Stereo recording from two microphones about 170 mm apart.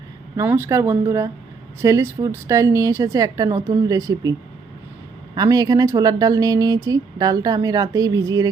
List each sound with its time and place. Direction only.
0.3 s speech: 15° right (ahead or behind)